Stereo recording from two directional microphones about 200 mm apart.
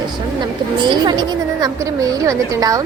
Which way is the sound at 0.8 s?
25° right (ahead or behind).